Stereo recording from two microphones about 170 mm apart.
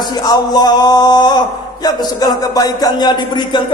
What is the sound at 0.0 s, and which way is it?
Speech, 25° left (ahead or behind).